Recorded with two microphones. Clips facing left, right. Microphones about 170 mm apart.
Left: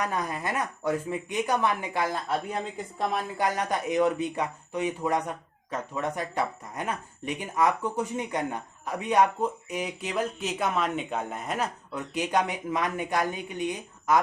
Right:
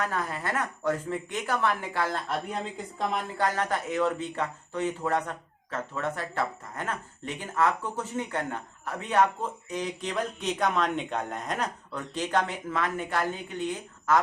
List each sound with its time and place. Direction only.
0.0 s speech: 15° left (ahead or behind)